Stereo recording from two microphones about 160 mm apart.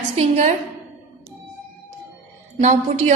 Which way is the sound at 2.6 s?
45° right (ahead or behind).